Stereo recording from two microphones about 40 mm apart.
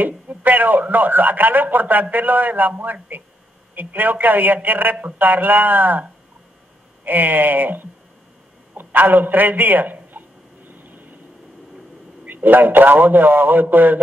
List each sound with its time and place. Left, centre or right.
0.0 s speech: right
7.1 s a man's voice: right
10.7 s vehicle: right
12.3 s speech: right